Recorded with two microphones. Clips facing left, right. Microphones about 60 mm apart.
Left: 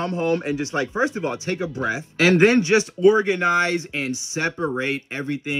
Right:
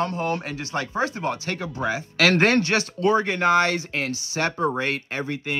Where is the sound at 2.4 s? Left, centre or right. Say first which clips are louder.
Left 4 dB; centre.